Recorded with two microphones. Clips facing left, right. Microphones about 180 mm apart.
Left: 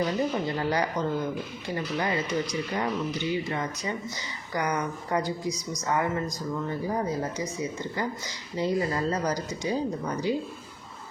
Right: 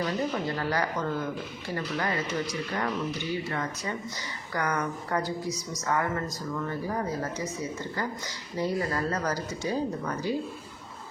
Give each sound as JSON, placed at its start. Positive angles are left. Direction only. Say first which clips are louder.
{"t": 0.0, "sound": "a woman's voice", "louder": "left 2 dB", "side_deg": 20}
{"t": 8.5, "sound": "a woman's voice", "louder": "left 2 dB", "side_deg": 20}